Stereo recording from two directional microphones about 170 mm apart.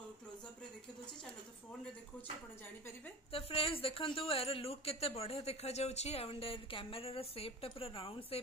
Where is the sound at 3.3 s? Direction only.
35° left (ahead or behind).